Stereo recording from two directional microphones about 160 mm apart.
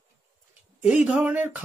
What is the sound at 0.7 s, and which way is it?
Speech, 10° right (ahead or behind).